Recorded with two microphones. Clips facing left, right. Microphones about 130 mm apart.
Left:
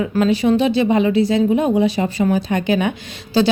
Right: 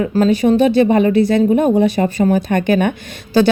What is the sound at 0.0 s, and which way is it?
Speech, 40° right (ahead or behind).